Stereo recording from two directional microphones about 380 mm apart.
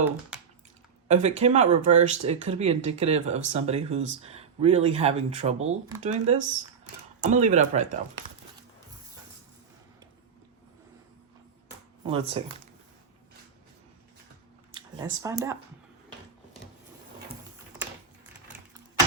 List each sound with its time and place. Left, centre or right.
1.0 s speech: centre
12.0 s speech: centre
14.8 s speech: centre